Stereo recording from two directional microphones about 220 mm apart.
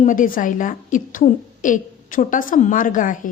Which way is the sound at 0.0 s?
35° left (ahead or behind).